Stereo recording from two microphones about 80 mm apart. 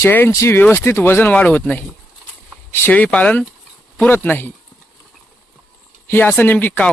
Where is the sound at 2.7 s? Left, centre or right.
Left.